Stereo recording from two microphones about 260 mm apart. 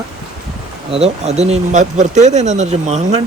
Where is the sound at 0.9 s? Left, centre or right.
Right.